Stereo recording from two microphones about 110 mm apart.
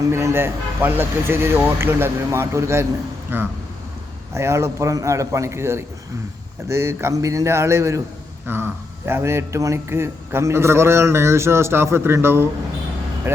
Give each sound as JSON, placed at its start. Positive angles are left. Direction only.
{"t": 0.0, "sound": "a man's voice", "side_deg": -25}